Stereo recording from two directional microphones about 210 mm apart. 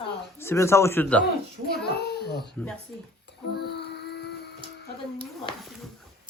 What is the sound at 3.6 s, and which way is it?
Music, 50° left (ahead or behind).